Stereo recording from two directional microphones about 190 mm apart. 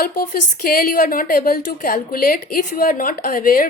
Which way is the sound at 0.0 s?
50° left (ahead or behind).